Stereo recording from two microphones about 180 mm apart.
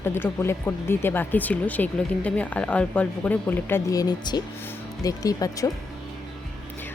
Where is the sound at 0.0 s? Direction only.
15° left (ahead or behind).